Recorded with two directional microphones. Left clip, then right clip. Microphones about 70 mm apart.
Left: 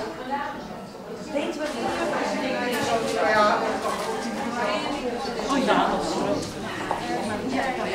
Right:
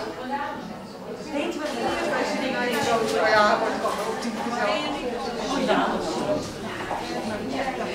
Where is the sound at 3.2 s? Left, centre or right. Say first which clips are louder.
Right 1 dB; centre.